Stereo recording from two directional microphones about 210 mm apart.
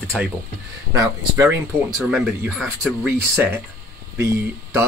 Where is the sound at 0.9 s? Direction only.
15° right (ahead or behind).